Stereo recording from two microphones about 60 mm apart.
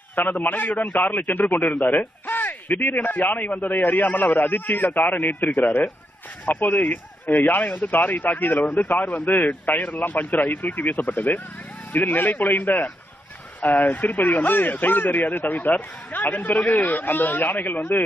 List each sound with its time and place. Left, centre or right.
0.1 s speech: left
1.4 s speech: left
1.9 s a sound: left
2.8 s speech: left
9.0 s speech: left